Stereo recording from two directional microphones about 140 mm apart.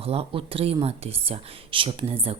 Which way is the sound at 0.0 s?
45° right (ahead or behind).